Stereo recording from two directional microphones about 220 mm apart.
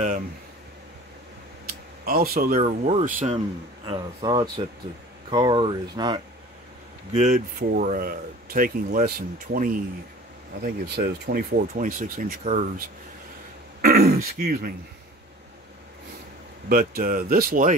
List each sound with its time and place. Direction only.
1.7 s speech: 40° right (ahead or behind)
3.8 s speech: 20° right (ahead or behind)
7.1 s speech: 30° right (ahead or behind)
13.7 s throat clearing: 45° right (ahead or behind)
16.6 s speech: 40° right (ahead or behind)